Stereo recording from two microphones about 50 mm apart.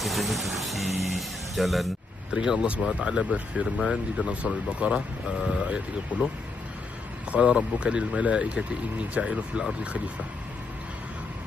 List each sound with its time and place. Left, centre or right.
0.0 s speech: centre
2.3 s speech: centre
7.3 s speech: right